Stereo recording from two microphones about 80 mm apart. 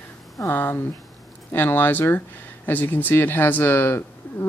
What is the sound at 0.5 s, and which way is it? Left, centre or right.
Speech, left.